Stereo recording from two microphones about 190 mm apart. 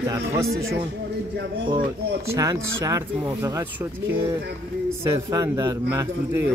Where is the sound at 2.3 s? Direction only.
15° right (ahead or behind).